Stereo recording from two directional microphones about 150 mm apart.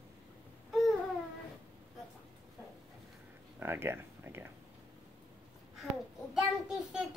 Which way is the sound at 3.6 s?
15° right (ahead or behind).